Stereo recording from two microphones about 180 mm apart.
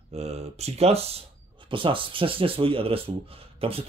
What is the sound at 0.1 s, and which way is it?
Speech, 35° right (ahead or behind).